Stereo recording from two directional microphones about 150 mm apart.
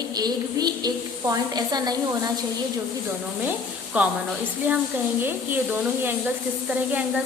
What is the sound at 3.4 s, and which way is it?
Speech, 10° right (ahead or behind).